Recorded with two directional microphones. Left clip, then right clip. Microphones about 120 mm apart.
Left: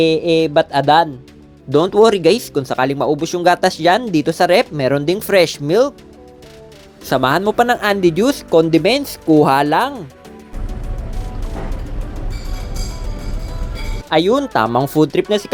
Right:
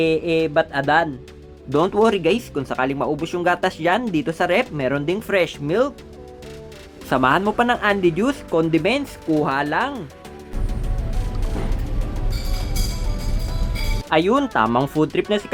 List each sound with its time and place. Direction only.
0.0 s music: 25° left (ahead or behind)
1.7 s speech: 30° left (ahead or behind)
7.1 s speech: 25° left (ahead or behind)
9.3 s speech: 50° left (ahead or behind)
14.1 s music: 20° left (ahead or behind)
14.9 s music: 30° left (ahead or behind)